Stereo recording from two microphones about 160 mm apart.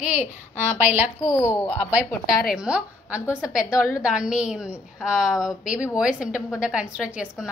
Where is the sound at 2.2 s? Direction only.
Centre (ahead or behind).